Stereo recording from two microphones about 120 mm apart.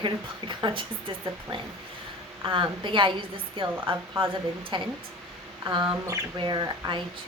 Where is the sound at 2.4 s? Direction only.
45° right (ahead or behind).